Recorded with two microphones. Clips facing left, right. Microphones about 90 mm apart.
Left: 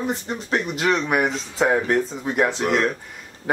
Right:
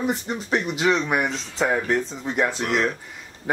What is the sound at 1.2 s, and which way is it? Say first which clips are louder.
A man's voice: left 3 dB; 15° left (ahead or behind).